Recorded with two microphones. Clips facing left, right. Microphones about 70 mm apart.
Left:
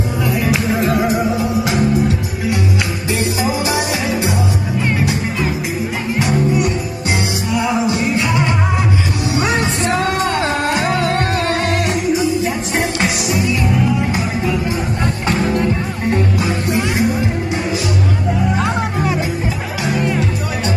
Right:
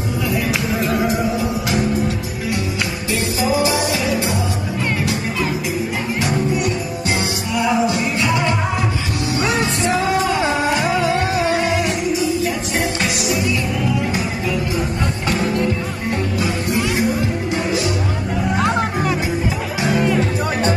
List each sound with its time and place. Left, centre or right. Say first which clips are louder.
3.6 s music: even; left
7.8 s music: left 2 dB; left
9.8 s music: right 1 dB; centre
12.7 s music: left 2 dB; left
16.3 s music: left 2 dB; left